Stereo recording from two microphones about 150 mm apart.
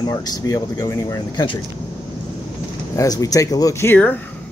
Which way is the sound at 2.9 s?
20° left (ahead or behind).